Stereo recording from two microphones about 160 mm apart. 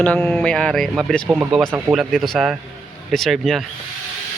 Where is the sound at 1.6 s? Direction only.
15° right (ahead or behind).